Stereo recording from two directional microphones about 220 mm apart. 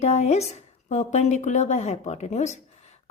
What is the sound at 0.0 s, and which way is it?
A woman's voice, 30° left (ahead or behind).